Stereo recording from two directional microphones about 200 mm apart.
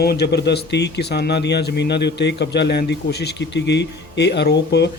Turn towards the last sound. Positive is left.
turn(degrees=55)  # may be behind; listen again after turning